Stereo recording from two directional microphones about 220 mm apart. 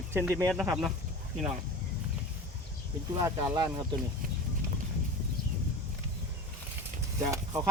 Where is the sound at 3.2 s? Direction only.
20° right (ahead or behind).